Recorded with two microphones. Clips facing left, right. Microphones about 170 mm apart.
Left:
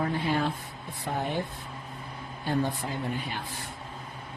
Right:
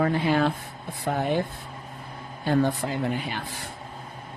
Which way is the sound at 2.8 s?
90° right.